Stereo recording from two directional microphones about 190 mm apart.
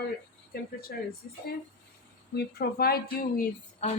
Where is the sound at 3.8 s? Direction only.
35° left (ahead or behind).